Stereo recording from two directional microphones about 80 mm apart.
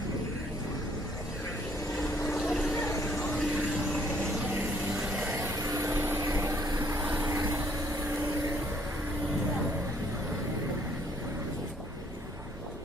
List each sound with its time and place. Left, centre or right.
2.3 s vehicle: centre
2.7 s a sound: left
3.3 s vehicle: centre
5.0 s vehicle: centre
5.3 s vehicle: right